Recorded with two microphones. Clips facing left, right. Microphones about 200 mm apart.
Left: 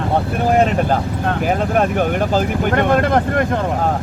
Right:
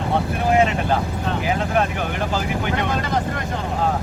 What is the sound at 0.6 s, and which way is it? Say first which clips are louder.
Speech: left 3 dB; 55° left (ahead or behind).